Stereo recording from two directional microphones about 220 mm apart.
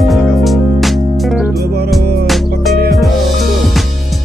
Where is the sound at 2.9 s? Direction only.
Centre (ahead or behind).